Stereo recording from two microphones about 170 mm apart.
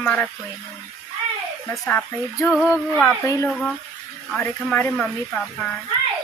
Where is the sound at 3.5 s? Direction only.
5° left (ahead or behind).